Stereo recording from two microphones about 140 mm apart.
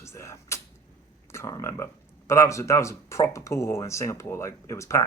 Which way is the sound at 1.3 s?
20° left (ahead or behind).